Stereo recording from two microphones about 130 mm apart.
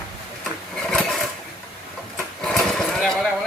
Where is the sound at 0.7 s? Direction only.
5° left (ahead or behind).